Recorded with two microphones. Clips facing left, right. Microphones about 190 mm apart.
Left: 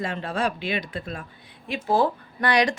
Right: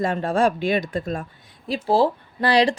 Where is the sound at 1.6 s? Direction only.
35° right (ahead or behind).